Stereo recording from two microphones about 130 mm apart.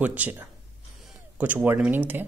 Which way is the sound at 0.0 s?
10° right (ahead or behind).